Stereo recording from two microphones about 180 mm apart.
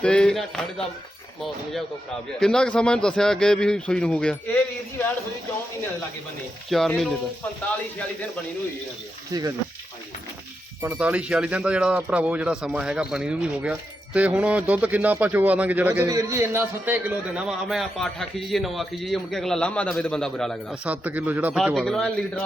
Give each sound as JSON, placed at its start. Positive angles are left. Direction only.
{"t": 0.0, "sound": "speech", "side_deg": 5}
{"t": 2.4, "sound": "speech", "side_deg": 5}
{"t": 6.7, "sound": "speech", "side_deg": 0}
{"t": 9.3, "sound": "speech", "side_deg": -20}
{"t": 10.8, "sound": "speech", "side_deg": -10}
{"t": 20.8, "sound": "a man's voice", "side_deg": -10}